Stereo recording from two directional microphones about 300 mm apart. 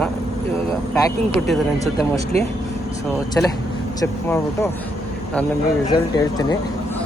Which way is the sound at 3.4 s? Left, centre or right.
Centre.